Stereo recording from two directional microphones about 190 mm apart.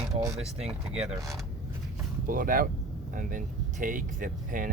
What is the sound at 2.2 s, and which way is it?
Speech, 45° right (ahead or behind).